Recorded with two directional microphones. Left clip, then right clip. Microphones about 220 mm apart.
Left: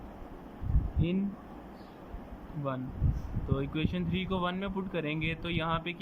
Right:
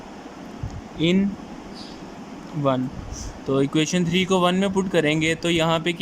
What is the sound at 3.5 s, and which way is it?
Speech, 25° right (ahead or behind).